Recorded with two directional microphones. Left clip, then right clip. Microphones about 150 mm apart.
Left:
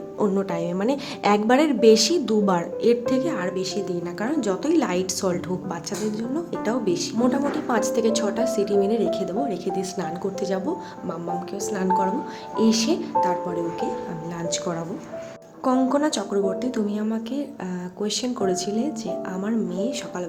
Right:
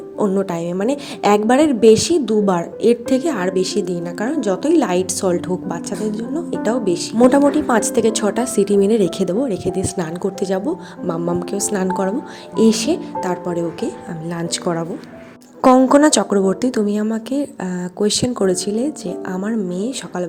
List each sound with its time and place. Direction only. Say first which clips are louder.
0.2 s speech: right 5 dB; 20° right (ahead or behind)
0.4 s speech: right 4 dB; 35° right (ahead or behind)
4.3 s a woman's voice: right 6 dB; 25° right (ahead or behind)
7.3 s a woman's voice: right 10 dB; 50° right (ahead or behind)
9.4 s speech: right 5 dB; 35° right (ahead or behind)
11.1 s a woman's voice: right 8 dB; 50° right (ahead or behind)
15.9 s speech: right 10 dB; 50° right (ahead or behind); by 20.2 s 35° right (ahead or behind)